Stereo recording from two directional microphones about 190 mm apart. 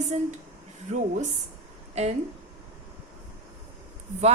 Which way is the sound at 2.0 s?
35° right (ahead or behind).